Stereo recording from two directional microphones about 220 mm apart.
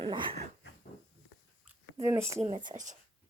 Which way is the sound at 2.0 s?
10° right (ahead or behind).